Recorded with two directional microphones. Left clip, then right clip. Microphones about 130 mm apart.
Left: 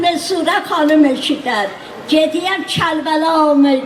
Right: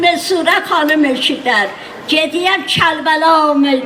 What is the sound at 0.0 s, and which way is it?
A woman's voice, 20° right (ahead or behind).